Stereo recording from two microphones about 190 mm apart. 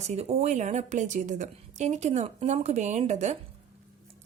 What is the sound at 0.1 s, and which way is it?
A woman's voice, 35° right (ahead or behind).